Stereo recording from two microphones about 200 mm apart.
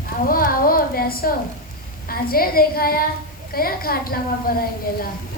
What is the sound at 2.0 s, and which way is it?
A woman's voice, 45° left (ahead or behind).